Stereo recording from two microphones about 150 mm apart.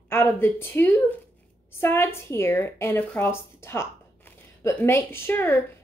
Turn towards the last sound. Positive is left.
turn(degrees=15)  # may be behind; listen again after turning